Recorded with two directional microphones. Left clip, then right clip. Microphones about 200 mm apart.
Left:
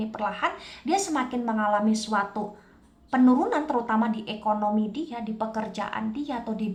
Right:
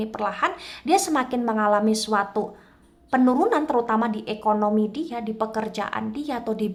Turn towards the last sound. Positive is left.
turn(degrees=-35)  # may be behind; listen again after turning